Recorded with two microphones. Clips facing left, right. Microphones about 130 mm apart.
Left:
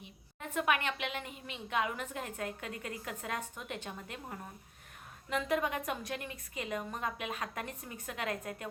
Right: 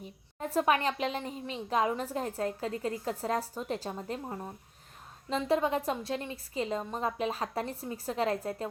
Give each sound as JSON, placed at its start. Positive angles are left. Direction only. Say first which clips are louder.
{"t": 0.0, "sound": "a woman's voice", "louder": "right 8 dB", "side_deg": -35}